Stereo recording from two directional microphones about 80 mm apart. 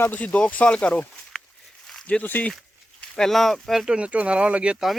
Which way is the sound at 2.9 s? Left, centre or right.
Centre.